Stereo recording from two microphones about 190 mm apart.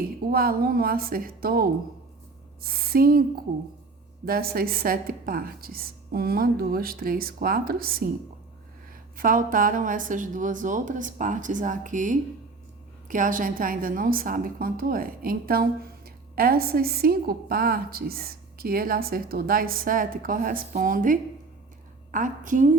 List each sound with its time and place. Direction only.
0.3 s a woman's voice: 50° right (ahead or behind)
4.3 s a woman's voice: 50° right (ahead or behind)
9.1 s a woman's voice: 45° right (ahead or behind)